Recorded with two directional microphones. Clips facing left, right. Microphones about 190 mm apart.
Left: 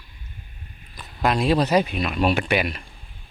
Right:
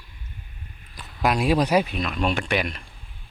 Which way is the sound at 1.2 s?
10° right (ahead or behind).